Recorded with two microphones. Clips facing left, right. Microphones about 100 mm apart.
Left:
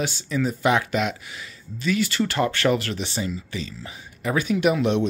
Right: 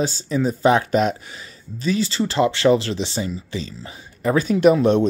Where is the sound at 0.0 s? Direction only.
35° right (ahead or behind).